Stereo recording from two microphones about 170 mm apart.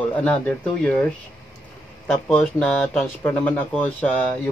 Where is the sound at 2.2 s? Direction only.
5° left (ahead or behind).